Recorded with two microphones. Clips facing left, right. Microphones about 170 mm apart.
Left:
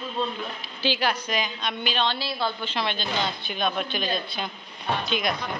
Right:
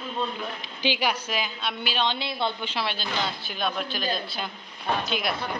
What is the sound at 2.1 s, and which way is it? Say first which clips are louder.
Speech: even; 20° right (ahead or behind).